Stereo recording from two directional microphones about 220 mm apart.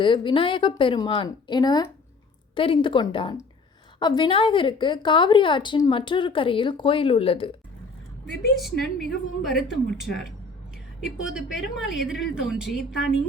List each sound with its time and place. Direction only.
0.0 s a woman's voice: 20° left (ahead or behind)
8.3 s a woman's voice: centre (ahead or behind)
11.0 s a woman's voice: 5° right (ahead or behind)